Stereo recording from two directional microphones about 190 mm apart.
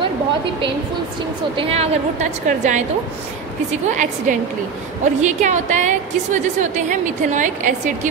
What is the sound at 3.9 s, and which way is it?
A woman's voice, 40° right (ahead or behind).